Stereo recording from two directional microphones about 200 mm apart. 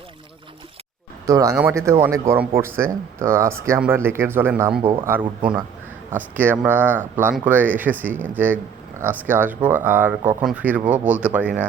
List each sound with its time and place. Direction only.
1.3 s speech: 15° right (ahead or behind)
4.8 s speech: 25° right (ahead or behind)
6.1 s speech: 10° right (ahead or behind)